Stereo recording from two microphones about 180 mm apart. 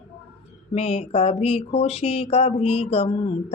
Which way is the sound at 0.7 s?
35° left (ahead or behind).